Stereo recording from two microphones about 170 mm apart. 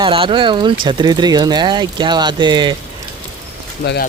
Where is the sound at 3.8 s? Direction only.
80° left.